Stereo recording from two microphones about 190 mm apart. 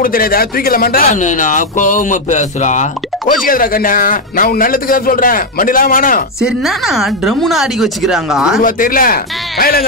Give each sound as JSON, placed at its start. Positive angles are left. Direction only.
{"t": 0.0, "sound": "speech", "side_deg": 50}
{"t": 6.4, "sound": "a woman's voice", "side_deg": 0}
{"t": 8.6, "sound": "speech", "side_deg": 45}